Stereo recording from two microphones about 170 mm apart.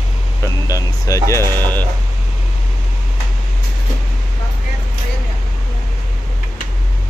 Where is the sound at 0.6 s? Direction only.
20° left (ahead or behind).